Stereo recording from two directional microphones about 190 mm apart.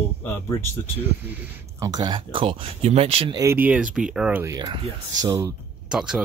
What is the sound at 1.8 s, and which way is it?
Speech, 20° right (ahead or behind).